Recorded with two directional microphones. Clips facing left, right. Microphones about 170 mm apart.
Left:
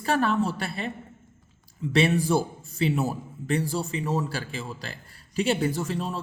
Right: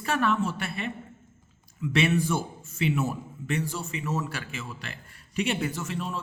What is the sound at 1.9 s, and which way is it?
Speech, 35° left (ahead or behind).